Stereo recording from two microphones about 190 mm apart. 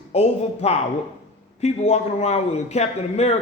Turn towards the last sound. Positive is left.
turn(degrees=35)  # may be behind; listen again after turning